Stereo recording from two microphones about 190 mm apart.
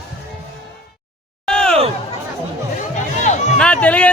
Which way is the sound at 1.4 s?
5° left (ahead or behind).